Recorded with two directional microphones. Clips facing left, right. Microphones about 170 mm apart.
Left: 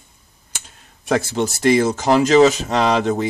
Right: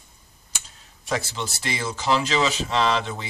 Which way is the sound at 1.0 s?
55° left (ahead or behind).